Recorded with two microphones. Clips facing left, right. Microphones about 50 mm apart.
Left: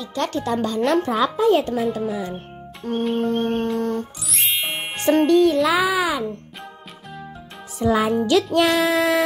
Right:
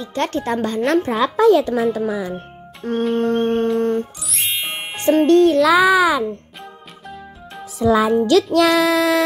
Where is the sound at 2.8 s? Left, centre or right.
Right.